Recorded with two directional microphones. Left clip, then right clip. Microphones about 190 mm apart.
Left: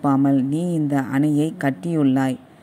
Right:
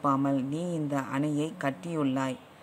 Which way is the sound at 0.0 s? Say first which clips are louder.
Left 8 dB; 15° left (ahead or behind).